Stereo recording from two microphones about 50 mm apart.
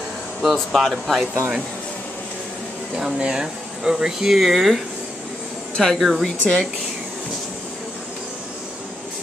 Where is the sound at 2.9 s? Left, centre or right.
Centre.